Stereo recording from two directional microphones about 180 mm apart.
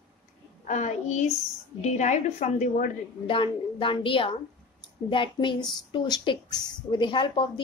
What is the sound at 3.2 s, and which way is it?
Speech, 30° left (ahead or behind).